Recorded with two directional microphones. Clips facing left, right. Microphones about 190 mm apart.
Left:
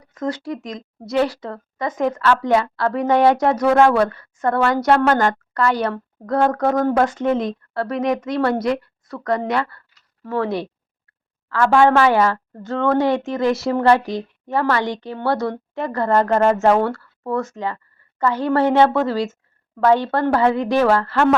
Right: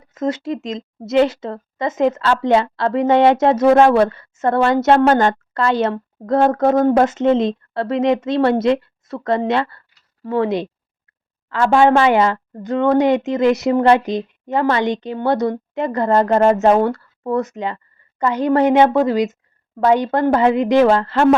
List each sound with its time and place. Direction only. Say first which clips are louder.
0.0 s a woman's voice: right 4 dB; 20° right (ahead or behind)